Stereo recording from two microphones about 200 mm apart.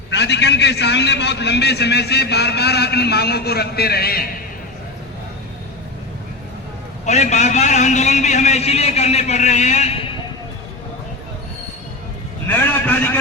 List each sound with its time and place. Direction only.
0.1 s a man's voice: 60° left (ahead or behind)
7.0 s a man's voice: 35° left (ahead or behind)
12.5 s a man's voice: 10° left (ahead or behind)